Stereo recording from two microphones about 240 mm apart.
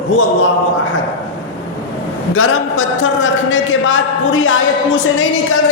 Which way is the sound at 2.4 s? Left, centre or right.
Left.